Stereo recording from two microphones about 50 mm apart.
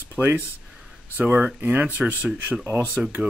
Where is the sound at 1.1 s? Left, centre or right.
Right.